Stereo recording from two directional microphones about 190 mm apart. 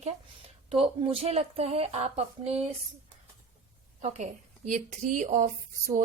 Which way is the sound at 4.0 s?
35° right (ahead or behind).